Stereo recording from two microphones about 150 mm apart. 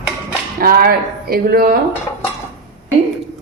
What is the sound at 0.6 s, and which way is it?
Speech, 80° right.